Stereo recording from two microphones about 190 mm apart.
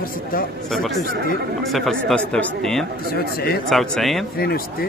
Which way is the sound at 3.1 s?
55° left (ahead or behind).